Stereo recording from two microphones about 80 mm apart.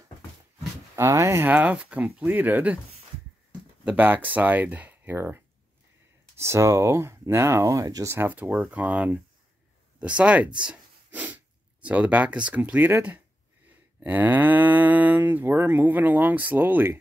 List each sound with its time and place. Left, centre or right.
0.9 s speech: right
1.4 s livestock: right
3.8 s livestock: right
5.1 s speech: right
8.1 s speech: right
14.0 s livestock: right